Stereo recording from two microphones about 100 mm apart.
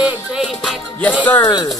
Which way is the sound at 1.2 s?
20° left (ahead or behind).